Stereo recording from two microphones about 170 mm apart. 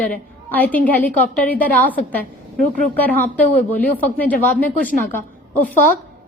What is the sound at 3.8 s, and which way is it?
A woman's voice, 10° left (ahead or behind).